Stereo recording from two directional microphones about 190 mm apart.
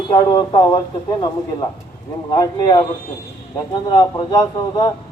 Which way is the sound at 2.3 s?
20° left (ahead or behind).